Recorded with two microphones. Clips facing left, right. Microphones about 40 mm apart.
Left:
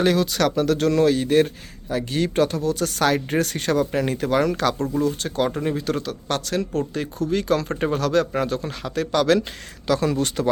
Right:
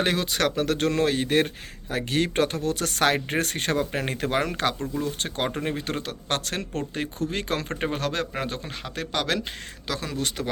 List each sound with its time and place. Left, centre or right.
0.0 s speech: right; by 9.9 s centre
9.9 s speech: centre